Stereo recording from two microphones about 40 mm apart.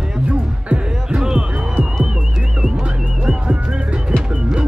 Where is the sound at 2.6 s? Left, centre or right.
Right.